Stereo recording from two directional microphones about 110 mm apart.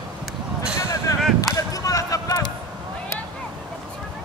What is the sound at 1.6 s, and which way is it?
Basketball bounce, 30° left (ahead or behind).